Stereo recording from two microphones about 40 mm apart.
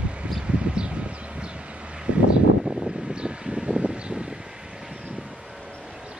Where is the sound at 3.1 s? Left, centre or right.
Right.